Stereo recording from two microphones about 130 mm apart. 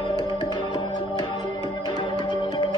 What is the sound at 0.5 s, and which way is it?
Music, 40° left (ahead or behind).